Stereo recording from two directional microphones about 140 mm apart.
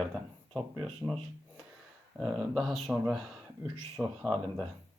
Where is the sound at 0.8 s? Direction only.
Centre (ahead or behind).